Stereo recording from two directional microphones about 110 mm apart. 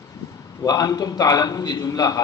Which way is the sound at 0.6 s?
35° left (ahead or behind).